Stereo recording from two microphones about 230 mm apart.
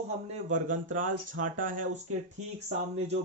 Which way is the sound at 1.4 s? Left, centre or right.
Right.